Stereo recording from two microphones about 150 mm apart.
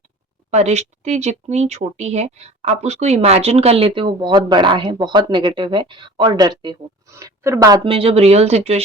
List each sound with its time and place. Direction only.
0.5 s speech: 50° right (ahead or behind); by 7.8 s 20° right (ahead or behind)
7.9 s speech: 40° right (ahead or behind)